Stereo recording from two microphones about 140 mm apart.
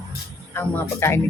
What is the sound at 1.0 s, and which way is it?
Speech, 20° left (ahead or behind).